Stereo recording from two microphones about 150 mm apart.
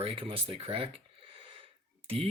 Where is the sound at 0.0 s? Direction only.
35° right (ahead or behind).